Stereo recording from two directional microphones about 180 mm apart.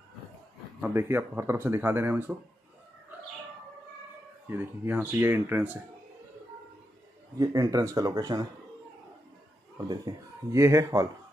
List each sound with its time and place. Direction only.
0.7 s speech: 10° right (ahead or behind)
4.5 s speech: 10° right (ahead or behind)
7.3 s speech: 20° right (ahead or behind)
9.8 s speech: 20° right (ahead or behind)